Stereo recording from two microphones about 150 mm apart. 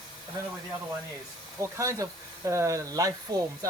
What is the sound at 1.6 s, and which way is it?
Speech, 20° right (ahead or behind).